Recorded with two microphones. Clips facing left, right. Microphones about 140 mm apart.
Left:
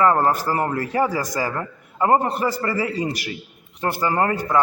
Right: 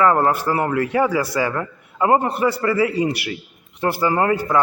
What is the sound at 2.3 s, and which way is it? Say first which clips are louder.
Speech: right 3 dB; 40° left (ahead or behind).